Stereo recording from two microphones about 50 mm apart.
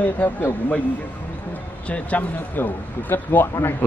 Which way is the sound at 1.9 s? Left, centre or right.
Left.